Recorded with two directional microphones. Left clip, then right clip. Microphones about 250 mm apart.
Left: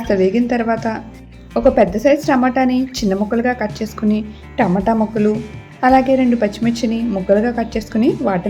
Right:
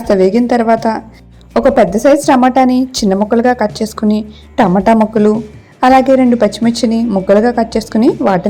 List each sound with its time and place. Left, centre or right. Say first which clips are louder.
0.0 s a woman's voice: right 5 dB; right